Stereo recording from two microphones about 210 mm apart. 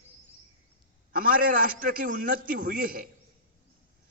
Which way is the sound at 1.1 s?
45° right (ahead or behind).